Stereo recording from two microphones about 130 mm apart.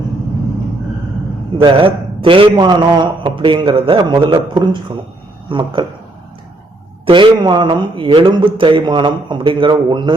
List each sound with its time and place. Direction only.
1.6 s a man's voice: 40° right (ahead or behind)
7.0 s a man's voice: 40° right (ahead or behind)